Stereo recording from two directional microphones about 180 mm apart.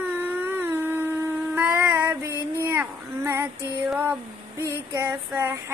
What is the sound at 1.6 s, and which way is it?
Female singing, 10° right (ahead or behind).